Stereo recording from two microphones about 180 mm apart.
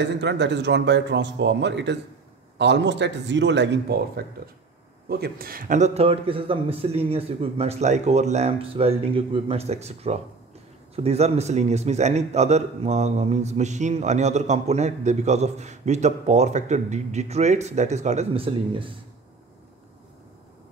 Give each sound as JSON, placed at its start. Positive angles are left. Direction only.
{"t": 0.0, "sound": "a man's voice", "side_deg": -75}